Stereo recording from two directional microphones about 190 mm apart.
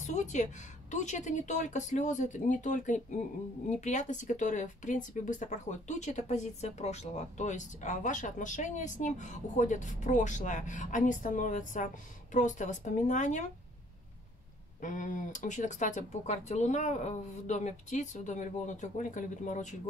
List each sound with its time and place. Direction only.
0.0 s speech: 40° left (ahead or behind)
14.8 s speech: 45° left (ahead or behind)